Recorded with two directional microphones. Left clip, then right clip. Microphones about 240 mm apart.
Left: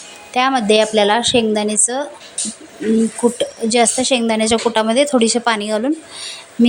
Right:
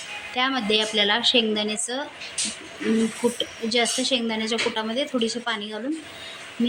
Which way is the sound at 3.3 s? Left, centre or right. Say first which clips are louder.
Left 8 dB; left.